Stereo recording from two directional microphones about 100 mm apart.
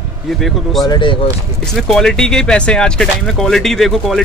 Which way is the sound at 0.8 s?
55° left (ahead or behind).